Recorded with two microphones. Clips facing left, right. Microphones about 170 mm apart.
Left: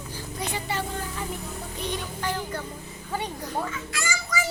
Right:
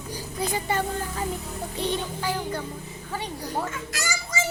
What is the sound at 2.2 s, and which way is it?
Speech, 10° right (ahead or behind).